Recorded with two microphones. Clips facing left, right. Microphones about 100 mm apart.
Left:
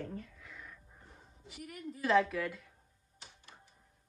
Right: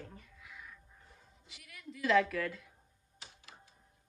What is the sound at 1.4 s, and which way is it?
Speech, 45° left (ahead or behind).